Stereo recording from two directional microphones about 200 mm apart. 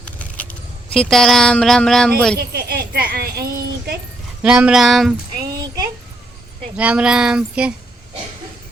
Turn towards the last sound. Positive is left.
turn(degrees=-5)  # may be behind; listen again after turning